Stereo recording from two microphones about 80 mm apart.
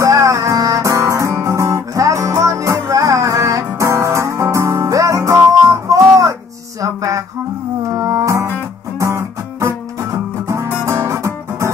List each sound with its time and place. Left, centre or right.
0.0 s music: right
6.8 s a sound: right
7.9 s music: right
10.9 s guitar: right